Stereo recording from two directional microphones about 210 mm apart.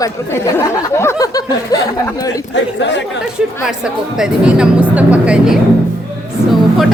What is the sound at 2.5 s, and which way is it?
Speech, 60° left (ahead or behind).